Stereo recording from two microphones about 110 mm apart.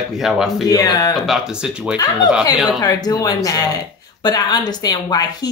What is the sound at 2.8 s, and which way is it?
Speech, 35° left (ahead or behind).